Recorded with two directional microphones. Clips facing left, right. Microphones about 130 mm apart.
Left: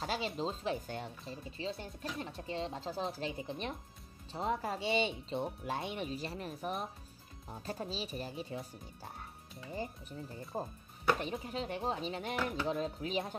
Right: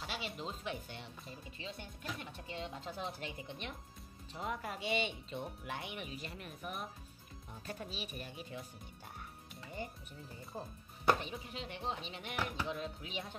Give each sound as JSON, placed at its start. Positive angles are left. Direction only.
{"t": 0.0, "sound": "music", "side_deg": 40}
{"t": 0.4, "sound": "speech", "side_deg": 35}
{"t": 1.2, "sound": "speech", "side_deg": 30}
{"t": 10.5, "sound": "speech", "side_deg": 50}